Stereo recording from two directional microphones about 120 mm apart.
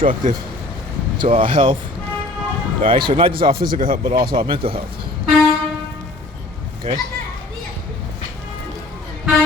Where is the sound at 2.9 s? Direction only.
45° right (ahead or behind).